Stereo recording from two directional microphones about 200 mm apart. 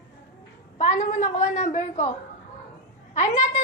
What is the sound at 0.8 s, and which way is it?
A woman's voice, 35° left (ahead or behind).